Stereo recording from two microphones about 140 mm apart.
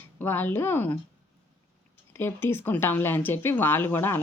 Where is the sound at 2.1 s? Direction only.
15° left (ahead or behind).